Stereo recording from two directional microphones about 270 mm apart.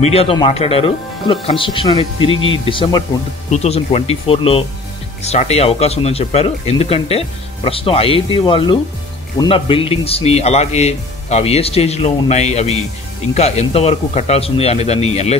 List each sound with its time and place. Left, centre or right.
0.0 s speech: left
2.3 s speech: left
2.6 s speech: centre